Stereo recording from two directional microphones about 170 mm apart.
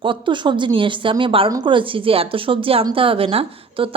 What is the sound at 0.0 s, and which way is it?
A woman's voice, 30° right (ahead or behind).